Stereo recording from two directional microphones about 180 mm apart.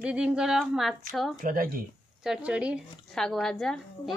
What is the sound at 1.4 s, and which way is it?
Speech, 50° right (ahead or behind).